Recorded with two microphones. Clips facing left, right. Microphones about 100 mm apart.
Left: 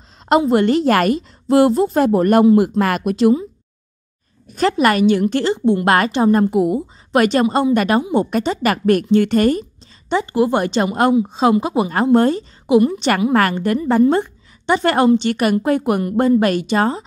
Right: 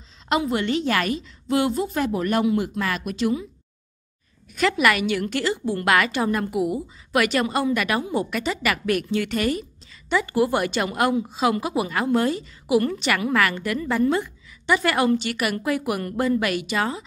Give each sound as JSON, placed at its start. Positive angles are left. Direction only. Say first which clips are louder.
{"t": 0.5, "sound": "a woman's voice", "louder": "left 9 dB", "side_deg": 45}
{"t": 2.8, "sound": "a woman's voice", "louder": "left 9 dB", "side_deg": 55}
{"t": 4.6, "sound": "a woman's voice", "louder": "left 5 dB", "side_deg": 35}
{"t": 5.9, "sound": "a woman's voice", "louder": "left 4 dB", "side_deg": 35}
{"t": 10.0, "sound": "a woman's voice", "louder": "left 4 dB", "side_deg": 25}
{"t": 12.6, "sound": "a woman's voice", "louder": "left 7 dB", "side_deg": 20}
{"t": 13.3, "sound": "a woman's voice", "louder": "left 6 dB", "side_deg": 35}